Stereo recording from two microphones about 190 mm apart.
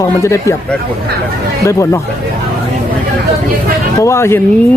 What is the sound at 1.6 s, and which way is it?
Speech, 15° left (ahead or behind).